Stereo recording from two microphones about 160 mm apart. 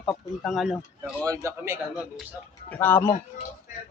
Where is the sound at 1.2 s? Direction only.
20° right (ahead or behind).